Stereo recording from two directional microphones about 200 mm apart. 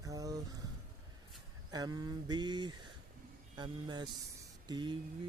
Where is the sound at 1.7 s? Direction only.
20° right (ahead or behind).